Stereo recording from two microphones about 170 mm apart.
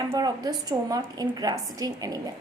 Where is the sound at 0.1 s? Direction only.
25° right (ahead or behind).